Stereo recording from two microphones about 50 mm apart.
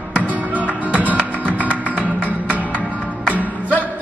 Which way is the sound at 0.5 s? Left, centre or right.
Right.